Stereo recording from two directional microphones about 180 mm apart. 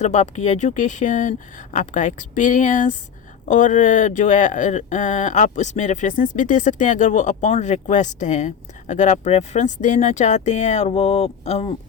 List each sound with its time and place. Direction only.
0.0 s speech: 40° left (ahead or behind)